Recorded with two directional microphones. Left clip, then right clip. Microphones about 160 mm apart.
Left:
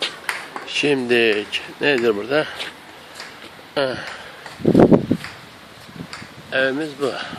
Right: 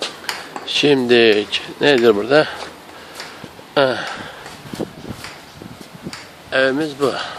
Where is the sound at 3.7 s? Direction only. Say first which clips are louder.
Right 6 dB; 20° right (ahead or behind).